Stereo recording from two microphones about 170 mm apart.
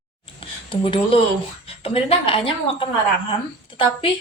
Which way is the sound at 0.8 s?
30° left (ahead or behind).